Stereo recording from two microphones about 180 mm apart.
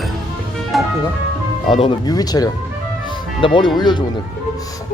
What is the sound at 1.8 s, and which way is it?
Speech, 25° left (ahead or behind).